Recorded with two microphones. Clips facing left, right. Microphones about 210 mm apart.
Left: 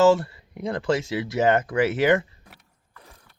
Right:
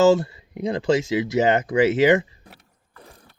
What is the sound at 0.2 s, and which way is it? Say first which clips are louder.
Speech: right 5 dB; 20° right (ahead or behind).